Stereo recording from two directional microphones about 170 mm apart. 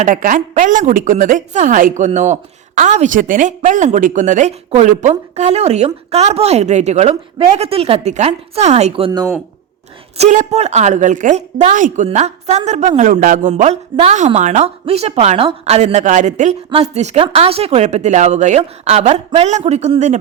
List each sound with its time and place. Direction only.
0.0 s a woman's voice: 50° right (ahead or behind)